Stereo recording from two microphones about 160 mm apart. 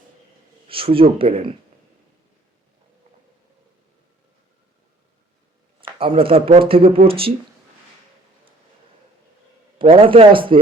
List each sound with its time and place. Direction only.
0.7 s speech: 35° right (ahead or behind)
6.0 s speech: 35° right (ahead or behind)
9.7 s speech: 35° right (ahead or behind)